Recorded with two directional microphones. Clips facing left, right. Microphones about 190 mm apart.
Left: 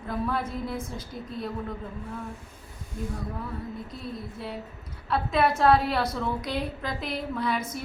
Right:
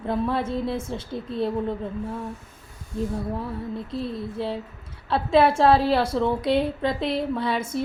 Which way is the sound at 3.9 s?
30° right (ahead or behind).